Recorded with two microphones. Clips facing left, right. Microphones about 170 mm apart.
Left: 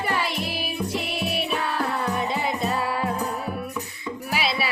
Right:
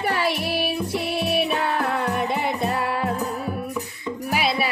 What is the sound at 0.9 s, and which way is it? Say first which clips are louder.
Music: right 4 dB; 60° right (ahead or behind).